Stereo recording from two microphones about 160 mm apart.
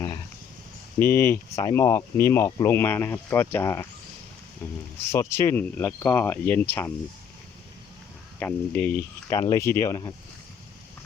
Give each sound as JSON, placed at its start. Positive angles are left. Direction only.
{"t": 0.9, "sound": "speech", "side_deg": 15}
{"t": 8.4, "sound": "speech", "side_deg": 10}